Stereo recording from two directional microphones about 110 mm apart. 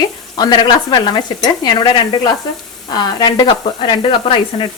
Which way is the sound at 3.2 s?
45° left (ahead or behind).